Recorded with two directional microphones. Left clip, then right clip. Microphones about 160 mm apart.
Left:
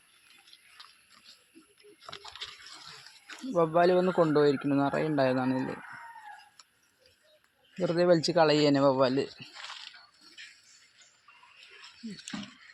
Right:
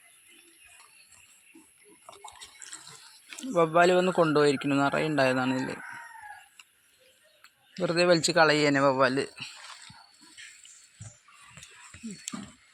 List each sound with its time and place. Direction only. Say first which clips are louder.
3.5 s speech: right 2 dB; 5° right (ahead or behind)
4.4 s speech: right 1 dB; centre (ahead or behind)
7.8 s speech: right 1 dB; 5° left (ahead or behind)